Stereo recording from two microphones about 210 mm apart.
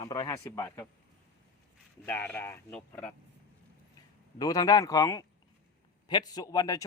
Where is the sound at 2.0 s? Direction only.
10° left (ahead or behind).